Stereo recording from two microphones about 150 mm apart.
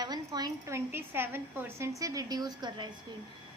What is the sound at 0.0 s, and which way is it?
Speech, 25° right (ahead or behind).